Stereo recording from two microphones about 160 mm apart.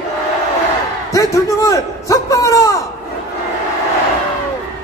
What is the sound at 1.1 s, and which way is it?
A man's voice, 20° left (ahead or behind).